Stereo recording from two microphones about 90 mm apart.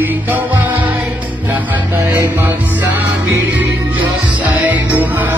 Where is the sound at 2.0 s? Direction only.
35° right (ahead or behind).